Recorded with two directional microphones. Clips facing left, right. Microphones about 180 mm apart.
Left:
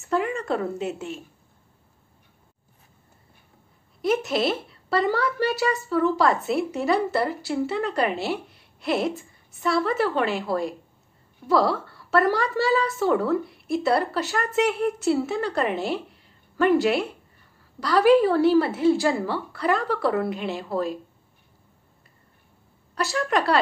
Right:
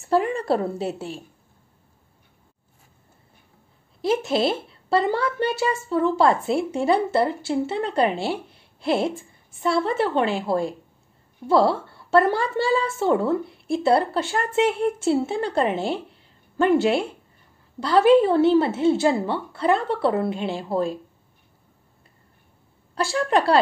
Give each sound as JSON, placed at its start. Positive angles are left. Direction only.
{"t": 0.0, "sound": "a woman's voice", "side_deg": -35}
{"t": 4.0, "sound": "a woman's voice", "side_deg": -30}
{"t": 22.9, "sound": "a woman's voice", "side_deg": -30}